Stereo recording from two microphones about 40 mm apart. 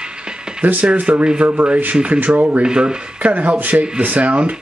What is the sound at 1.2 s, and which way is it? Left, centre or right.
Speech, right.